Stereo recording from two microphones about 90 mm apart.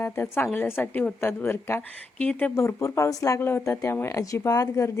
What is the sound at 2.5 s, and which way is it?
Speech, 35° left (ahead or behind).